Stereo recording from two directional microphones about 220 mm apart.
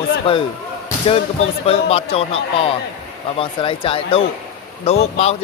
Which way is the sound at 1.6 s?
25° left (ahead or behind).